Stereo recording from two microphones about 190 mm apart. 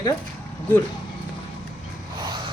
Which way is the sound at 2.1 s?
20° right (ahead or behind).